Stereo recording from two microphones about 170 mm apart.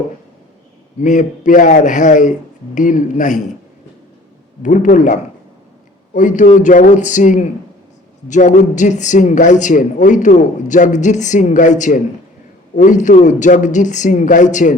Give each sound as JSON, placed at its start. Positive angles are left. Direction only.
{"t": 1.0, "sound": "a man's voice", "side_deg": 50}
{"t": 4.6, "sound": "a man's voice", "side_deg": 50}